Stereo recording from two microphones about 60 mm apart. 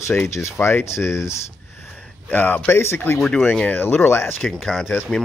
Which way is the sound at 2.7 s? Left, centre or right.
Left.